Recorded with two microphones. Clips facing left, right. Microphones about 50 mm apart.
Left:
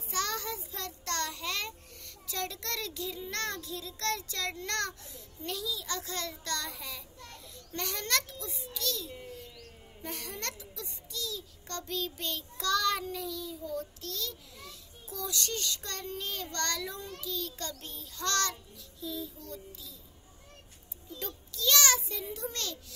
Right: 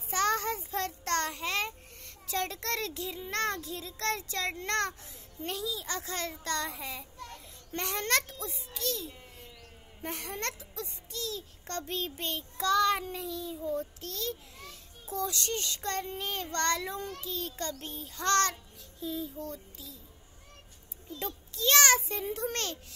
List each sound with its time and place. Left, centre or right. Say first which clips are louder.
0.1 s a child's voice: right 5 dB; right
21.2 s a child's voice: right 3 dB; right